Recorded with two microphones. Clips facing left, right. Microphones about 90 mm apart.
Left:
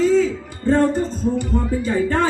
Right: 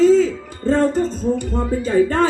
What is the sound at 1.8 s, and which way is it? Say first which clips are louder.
Speech: right 6 dB; 55° right (ahead or behind).